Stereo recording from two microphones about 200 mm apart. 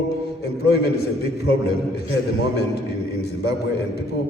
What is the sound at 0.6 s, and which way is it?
Speech, 55° left (ahead or behind).